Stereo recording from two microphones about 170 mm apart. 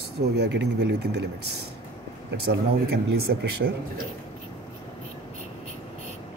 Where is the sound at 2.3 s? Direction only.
75° right (ahead or behind).